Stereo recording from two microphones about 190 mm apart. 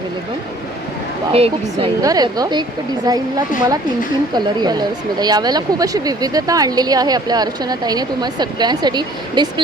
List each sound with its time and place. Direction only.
1.3 s speech: 30° right (ahead or behind)
2.0 s speech: 20° right (ahead or behind)
4.4 s speech: 20° right (ahead or behind)